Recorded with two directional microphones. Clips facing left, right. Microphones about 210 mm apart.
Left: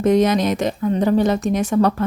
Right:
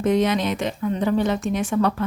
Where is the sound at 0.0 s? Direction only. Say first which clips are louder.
Left 4 dB; 40° left (ahead or behind).